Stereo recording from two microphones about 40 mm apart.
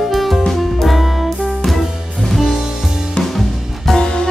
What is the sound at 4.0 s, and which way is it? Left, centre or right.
Music, left.